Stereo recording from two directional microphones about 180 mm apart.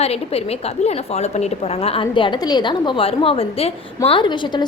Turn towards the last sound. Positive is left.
turn(degrees=25)  # may be behind; listen again after turning